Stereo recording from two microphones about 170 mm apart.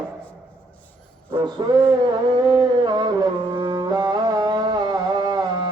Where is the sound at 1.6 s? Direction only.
25° right (ahead or behind).